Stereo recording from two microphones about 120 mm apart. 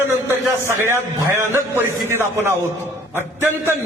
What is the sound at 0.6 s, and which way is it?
Speech, 20° right (ahead or behind).